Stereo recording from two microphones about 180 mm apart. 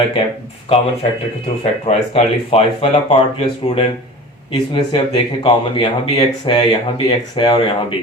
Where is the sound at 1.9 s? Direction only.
35° left (ahead or behind).